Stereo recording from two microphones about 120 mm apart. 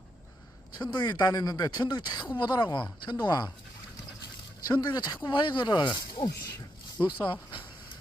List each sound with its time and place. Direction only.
0.8 s speech: 35° left (ahead or behind)
4.6 s speech: 35° left (ahead or behind)